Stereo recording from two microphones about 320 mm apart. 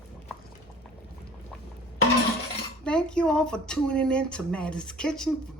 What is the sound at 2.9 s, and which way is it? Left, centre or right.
Speech, centre.